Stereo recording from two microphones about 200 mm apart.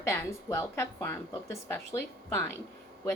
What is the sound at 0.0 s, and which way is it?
A woman's voice, 15° left (ahead or behind).